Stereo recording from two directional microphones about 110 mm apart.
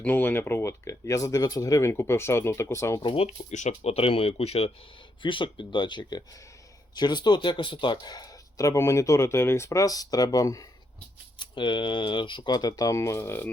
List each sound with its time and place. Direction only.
0.0 s speech: 15° left (ahead or behind)
3.0 s speech: 45° left (ahead or behind)
3.2 s speech: 90° left; by 4.7 s 65° left (ahead or behind)
5.2 s speech: 45° left (ahead or behind); by 10.7 s 30° left (ahead or behind)
11.3 s speech: 45° left (ahead or behind); by 13.5 s 20° left (ahead or behind)